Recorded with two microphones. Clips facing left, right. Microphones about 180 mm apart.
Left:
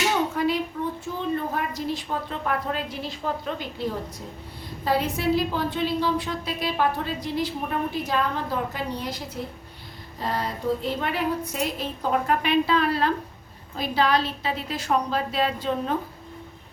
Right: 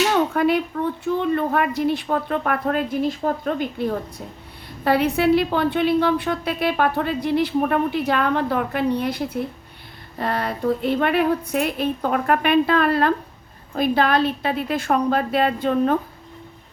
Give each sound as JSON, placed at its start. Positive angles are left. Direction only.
{"t": 0.1, "sound": "a woman's voice", "side_deg": -60}
{"t": 4.8, "sound": "a woman's voice", "side_deg": -65}